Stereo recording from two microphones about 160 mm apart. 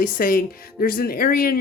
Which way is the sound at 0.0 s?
60° left (ahead or behind).